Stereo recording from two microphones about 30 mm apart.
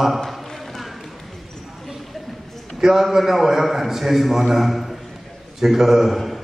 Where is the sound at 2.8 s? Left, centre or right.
Centre.